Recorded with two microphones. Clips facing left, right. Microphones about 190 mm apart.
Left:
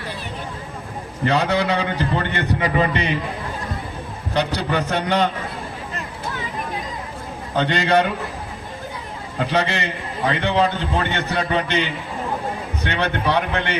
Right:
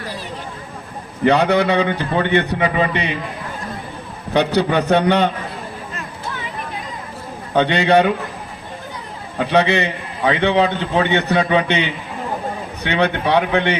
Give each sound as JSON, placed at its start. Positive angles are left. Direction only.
{"t": 1.2, "sound": "a man's voice", "side_deg": -65}
{"t": 4.4, "sound": "a man's voice", "side_deg": -60}
{"t": 7.5, "sound": "a man's voice", "side_deg": -60}
{"t": 9.4, "sound": "a man's voice", "side_deg": -60}